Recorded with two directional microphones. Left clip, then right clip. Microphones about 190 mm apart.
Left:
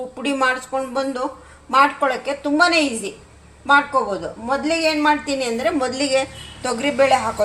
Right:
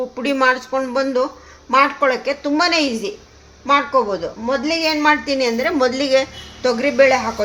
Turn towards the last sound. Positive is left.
turn(degrees=-25)  # may be behind; listen again after turning